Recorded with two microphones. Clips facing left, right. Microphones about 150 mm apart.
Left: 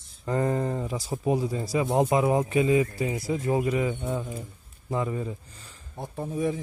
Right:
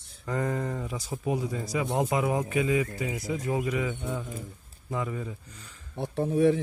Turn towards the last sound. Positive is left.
turn(degrees=-75)  # may be behind; listen again after turning